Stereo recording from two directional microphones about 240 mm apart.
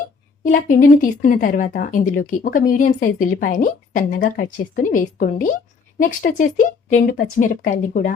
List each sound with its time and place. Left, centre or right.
0.4 s speech: left